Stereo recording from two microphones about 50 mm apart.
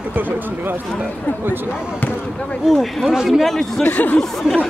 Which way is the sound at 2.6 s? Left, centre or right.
Centre.